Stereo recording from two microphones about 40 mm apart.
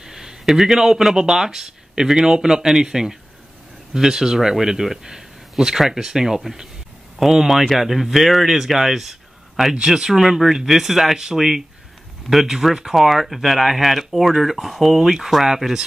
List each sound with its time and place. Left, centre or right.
0.0 s speech: centre
9.8 s speech: centre